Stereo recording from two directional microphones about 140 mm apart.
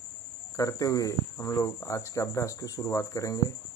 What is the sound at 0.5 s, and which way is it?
Speech, 25° left (ahead or behind).